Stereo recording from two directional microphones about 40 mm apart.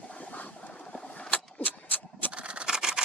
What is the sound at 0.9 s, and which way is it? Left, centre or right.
Vehicle, centre.